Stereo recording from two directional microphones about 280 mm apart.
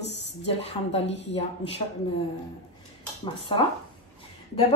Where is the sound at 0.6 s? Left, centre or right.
Left.